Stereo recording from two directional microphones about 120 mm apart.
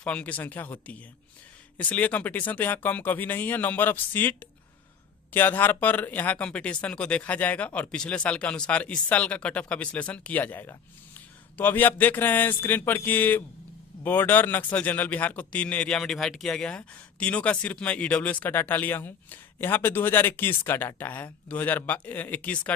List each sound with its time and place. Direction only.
0.0 s speech: 10° left (ahead or behind)